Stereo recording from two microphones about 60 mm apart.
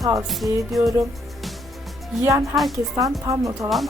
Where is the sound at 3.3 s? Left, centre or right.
Right.